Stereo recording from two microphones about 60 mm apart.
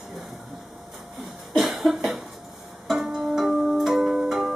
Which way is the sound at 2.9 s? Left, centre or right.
Centre.